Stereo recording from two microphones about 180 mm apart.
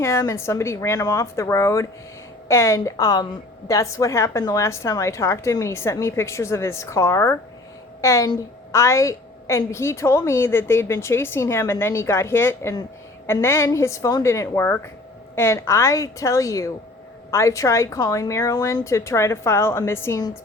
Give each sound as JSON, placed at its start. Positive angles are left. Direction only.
{"t": 0.0, "sound": "a woman's voice", "side_deg": 15}